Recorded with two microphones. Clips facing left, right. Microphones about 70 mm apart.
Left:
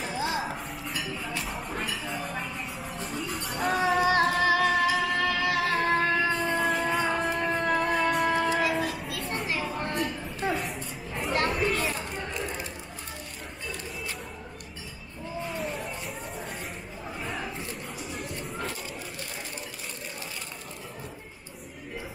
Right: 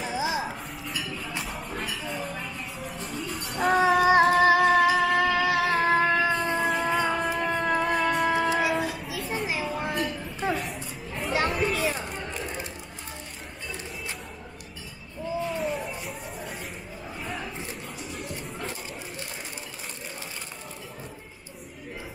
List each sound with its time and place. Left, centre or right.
0.1 s music: centre
0.8 s a sound: centre
1.4 s music: centre
4.2 s music: centre
5.7 s music: centre
8.3 s a sound: centre
8.5 s children playing: centre
15.5 s music: centre
17.2 s a sound: centre